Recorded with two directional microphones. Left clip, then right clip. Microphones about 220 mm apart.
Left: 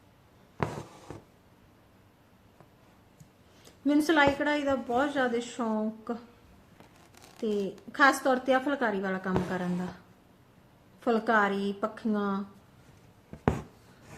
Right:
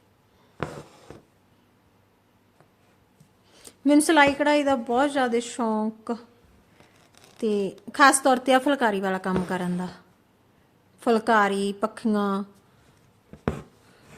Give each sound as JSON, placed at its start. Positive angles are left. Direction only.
{"t": 0.6, "sound": "a sound", "side_deg": 0}
{"t": 3.6, "sound": "a woman's voice", "side_deg": -45}
{"t": 7.4, "sound": "a woman's voice", "side_deg": -45}
{"t": 11.0, "sound": "a woman's voice", "side_deg": -45}
{"t": 13.3, "sound": "writing", "side_deg": 0}